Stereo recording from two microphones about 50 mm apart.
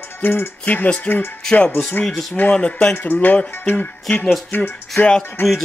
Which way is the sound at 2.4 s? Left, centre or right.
Left.